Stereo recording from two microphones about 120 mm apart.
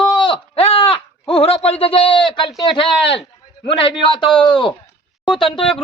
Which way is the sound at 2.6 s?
40° left (ahead or behind).